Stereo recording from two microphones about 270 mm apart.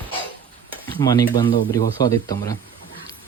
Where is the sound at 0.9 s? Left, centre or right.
Centre.